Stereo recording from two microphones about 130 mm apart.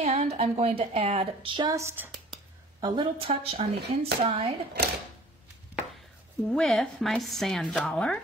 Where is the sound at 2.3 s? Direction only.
40° right (ahead or behind).